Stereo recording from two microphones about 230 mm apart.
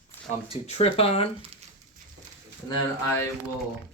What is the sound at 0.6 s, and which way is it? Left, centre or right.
Speech, left.